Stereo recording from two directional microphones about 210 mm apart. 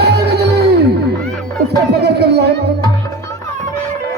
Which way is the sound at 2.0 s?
50° right (ahead or behind).